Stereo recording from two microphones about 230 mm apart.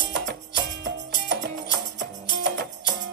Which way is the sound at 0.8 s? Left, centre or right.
Right.